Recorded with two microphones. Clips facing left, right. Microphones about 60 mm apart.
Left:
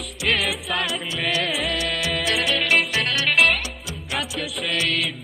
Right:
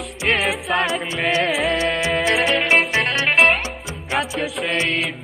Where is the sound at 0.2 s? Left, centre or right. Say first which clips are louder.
Right 3 dB; right.